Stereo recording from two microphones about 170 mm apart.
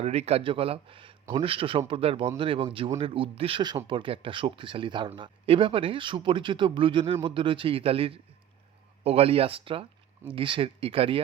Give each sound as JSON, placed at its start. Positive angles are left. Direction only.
{"t": 0.0, "sound": "speech", "side_deg": -40}